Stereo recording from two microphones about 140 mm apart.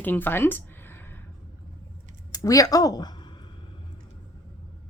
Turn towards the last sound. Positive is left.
turn(degrees=30)  # may be behind; listen again after turning